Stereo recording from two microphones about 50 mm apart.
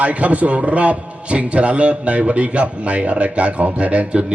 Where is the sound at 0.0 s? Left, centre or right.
Right.